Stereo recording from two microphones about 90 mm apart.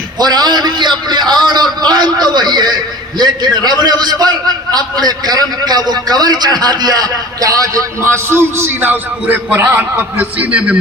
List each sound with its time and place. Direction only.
0.2 s a man's voice: 50° right (ahead or behind); by 10.8 s 15° right (ahead or behind)